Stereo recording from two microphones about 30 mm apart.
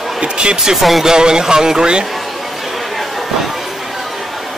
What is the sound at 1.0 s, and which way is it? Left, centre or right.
Speech, right.